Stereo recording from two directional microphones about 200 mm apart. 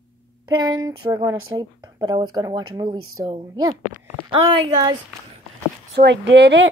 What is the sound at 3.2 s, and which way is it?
Speech, 25° right (ahead or behind).